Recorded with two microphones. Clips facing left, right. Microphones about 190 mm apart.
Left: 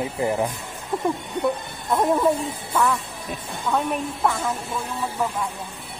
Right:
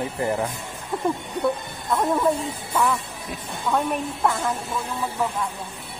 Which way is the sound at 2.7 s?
5° right (ahead or behind).